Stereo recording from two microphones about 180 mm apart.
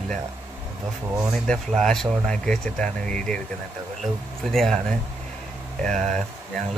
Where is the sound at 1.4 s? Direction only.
5° left (ahead or behind).